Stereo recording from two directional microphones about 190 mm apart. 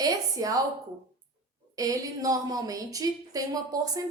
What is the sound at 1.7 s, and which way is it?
Speech, 20° right (ahead or behind).